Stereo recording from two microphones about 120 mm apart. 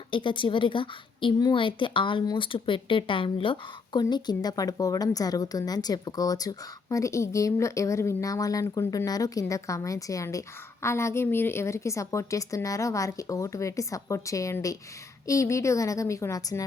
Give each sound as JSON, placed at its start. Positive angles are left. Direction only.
{"t": 0.1, "sound": "a woman's voice", "side_deg": 45}
{"t": 4.1, "sound": "a woman's voice", "side_deg": 35}